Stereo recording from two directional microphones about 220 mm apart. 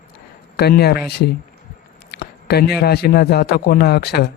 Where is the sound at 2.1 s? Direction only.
45° left (ahead or behind).